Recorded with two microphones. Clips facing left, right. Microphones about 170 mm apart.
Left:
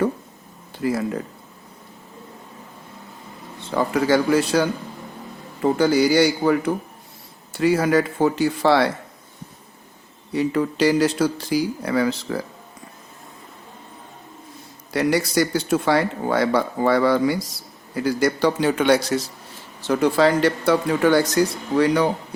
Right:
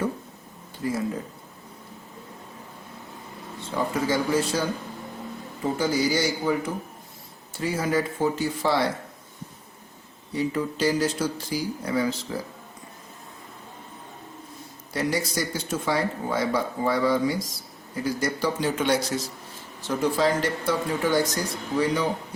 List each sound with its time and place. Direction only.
0.8 s speech: 70° left (ahead or behind)
3.8 s speech: 75° left (ahead or behind)
10.3 s speech: 70° left (ahead or behind)
14.9 s speech: 70° left (ahead or behind)